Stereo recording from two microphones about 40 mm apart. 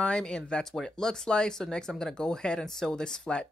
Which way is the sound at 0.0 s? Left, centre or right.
Left.